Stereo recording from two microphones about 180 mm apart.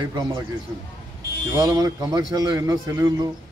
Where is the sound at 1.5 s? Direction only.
20° right (ahead or behind).